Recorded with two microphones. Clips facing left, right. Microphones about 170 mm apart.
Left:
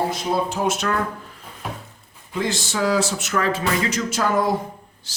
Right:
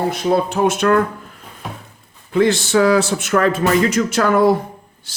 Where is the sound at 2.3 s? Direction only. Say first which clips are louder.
Right 10 dB; 60° right (ahead or behind).